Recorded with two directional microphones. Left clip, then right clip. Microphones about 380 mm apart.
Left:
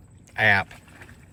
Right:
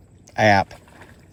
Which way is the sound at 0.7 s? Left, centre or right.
Right.